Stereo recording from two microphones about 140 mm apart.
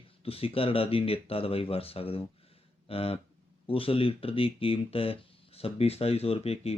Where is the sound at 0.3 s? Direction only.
45° left (ahead or behind).